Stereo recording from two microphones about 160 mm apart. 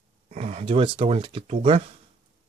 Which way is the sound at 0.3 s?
45° right (ahead or behind).